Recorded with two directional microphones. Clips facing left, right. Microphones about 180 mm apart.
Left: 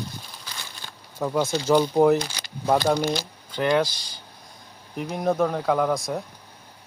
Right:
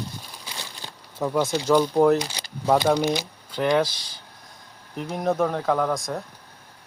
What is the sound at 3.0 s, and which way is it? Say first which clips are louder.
Speech: right 2 dB; 20° right (ahead or behind).